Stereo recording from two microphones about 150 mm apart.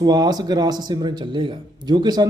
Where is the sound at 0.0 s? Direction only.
25° right (ahead or behind).